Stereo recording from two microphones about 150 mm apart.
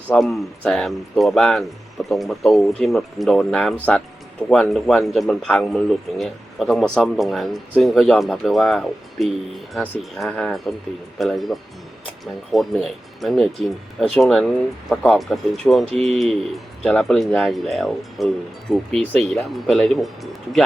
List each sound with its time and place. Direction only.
0.1 s speech: centre (ahead or behind)